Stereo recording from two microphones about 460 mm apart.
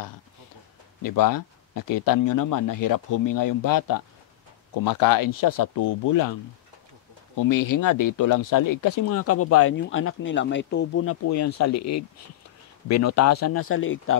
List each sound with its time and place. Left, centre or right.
1.0 s speech: left
7.3 s speech: left